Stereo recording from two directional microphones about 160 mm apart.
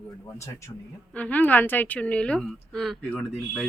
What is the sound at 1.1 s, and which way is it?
A woman's voice, 10° left (ahead or behind).